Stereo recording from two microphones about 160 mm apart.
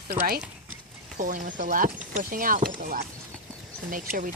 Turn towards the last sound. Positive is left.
turn(degrees=-60)  # may be behind; listen again after turning